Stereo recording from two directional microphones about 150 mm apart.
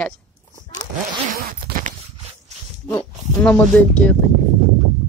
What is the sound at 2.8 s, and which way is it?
Speech, 15° left (ahead or behind).